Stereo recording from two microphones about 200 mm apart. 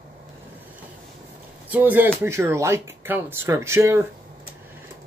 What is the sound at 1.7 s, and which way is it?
Speech, 10° right (ahead or behind).